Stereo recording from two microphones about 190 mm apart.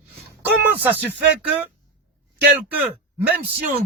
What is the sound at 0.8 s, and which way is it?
Speech, 10° right (ahead or behind).